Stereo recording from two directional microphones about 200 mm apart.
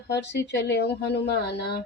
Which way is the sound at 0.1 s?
55° left (ahead or behind).